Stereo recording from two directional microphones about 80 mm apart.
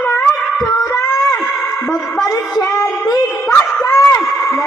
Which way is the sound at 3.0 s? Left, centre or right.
Left.